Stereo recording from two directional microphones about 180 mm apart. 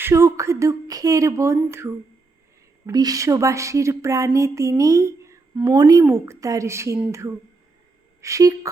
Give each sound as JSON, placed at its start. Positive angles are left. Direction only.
{"t": 0.0, "sound": "a woman's voice", "side_deg": -15}